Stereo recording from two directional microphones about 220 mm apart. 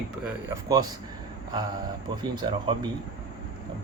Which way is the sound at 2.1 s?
20° right (ahead or behind).